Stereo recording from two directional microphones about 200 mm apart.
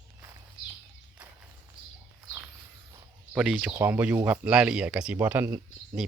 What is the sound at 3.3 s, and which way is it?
Speech, 5° right (ahead or behind).